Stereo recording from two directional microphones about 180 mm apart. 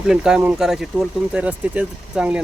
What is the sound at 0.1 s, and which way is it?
Speech, 5° right (ahead or behind).